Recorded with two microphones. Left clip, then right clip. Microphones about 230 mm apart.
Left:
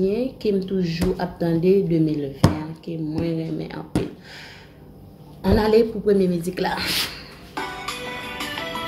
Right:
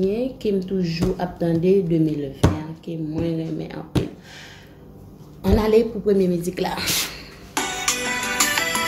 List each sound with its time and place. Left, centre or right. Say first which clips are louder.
0.0 s speech: even; centre
5.4 s speech: even; centre
7.5 s music: right 5 dB; right